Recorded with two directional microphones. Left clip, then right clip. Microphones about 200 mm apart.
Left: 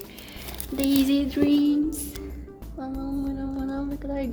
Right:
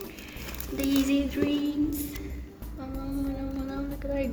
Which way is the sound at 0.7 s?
55° left (ahead or behind).